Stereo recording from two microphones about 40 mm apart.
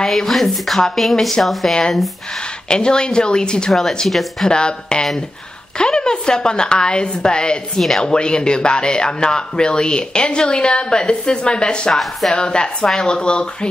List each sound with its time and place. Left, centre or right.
0.0 s speech: centre
2.7 s a man's voice: left
3.7 s speech: centre
4.5 s a man's voice: left
11.9 s speech: centre
12.3 s a man's voice: left